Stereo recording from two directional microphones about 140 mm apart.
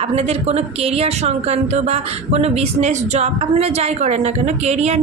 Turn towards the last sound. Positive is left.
turn(degrees=-50)  # may be behind; listen again after turning